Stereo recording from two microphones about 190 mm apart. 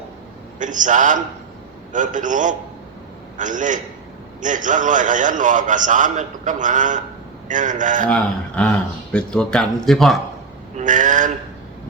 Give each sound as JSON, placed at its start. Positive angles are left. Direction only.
{"t": 0.6, "sound": "a man's voice", "side_deg": -40}
{"t": 8.0, "sound": "speech", "side_deg": 5}
{"t": 10.8, "sound": "a sound", "side_deg": -40}